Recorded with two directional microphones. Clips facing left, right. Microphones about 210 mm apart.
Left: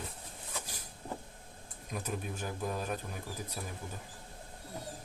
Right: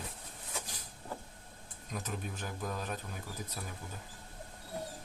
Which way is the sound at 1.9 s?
10° left (ahead or behind).